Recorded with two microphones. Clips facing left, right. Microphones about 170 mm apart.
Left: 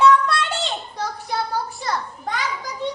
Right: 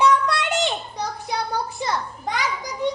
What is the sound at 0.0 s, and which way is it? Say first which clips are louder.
Child singing: left 3 dB; 15° right (ahead or behind).